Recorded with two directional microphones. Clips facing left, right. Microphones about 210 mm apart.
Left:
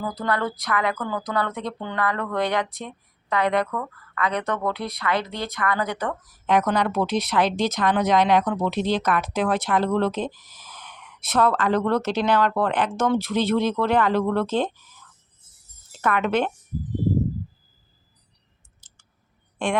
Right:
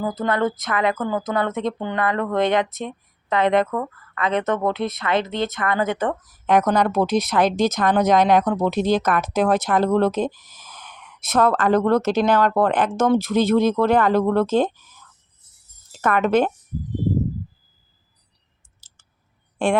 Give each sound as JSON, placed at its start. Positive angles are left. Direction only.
{"t": 0.0, "sound": "a woman's voice", "side_deg": -25}
{"t": 6.5, "sound": "speech", "side_deg": -45}
{"t": 16.0, "sound": "speech", "side_deg": -45}